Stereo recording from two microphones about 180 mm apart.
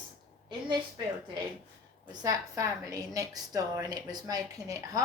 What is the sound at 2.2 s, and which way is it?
A woman's voice, 20° right (ahead or behind).